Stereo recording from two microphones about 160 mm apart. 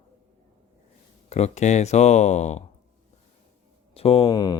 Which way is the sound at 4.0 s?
35° left (ahead or behind).